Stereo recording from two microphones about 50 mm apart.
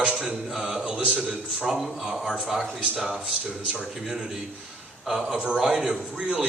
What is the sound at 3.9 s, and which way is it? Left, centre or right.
Speech, centre.